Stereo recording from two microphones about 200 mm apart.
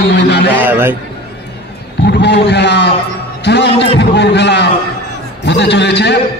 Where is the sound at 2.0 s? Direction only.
60° left (ahead or behind).